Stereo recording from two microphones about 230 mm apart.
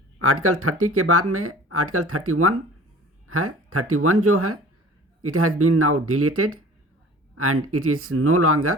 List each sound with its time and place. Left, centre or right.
0.2 s speech: right